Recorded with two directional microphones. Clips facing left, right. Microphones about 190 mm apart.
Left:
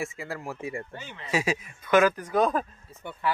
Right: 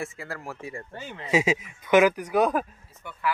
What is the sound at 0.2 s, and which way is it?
Speech, 20° left (ahead or behind).